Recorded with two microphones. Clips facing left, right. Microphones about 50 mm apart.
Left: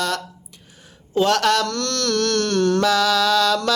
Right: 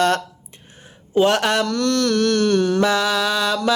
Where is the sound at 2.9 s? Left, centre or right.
Right.